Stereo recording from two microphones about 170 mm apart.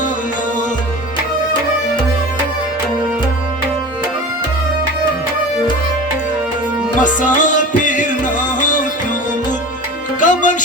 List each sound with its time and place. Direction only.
7.0 s music: 50° left (ahead or behind)
10.2 s music: 50° left (ahead or behind)